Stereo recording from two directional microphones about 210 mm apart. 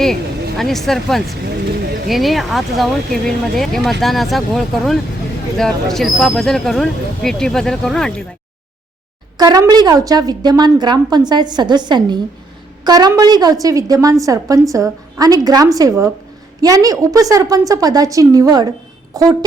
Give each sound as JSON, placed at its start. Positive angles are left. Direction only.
{"t": 0.5, "sound": "speech", "side_deg": 0}
{"t": 1.5, "sound": "a sound", "side_deg": -50}
{"t": 2.0, "sound": "speech", "side_deg": 0}
{"t": 9.4, "sound": "a woman's voice", "side_deg": -15}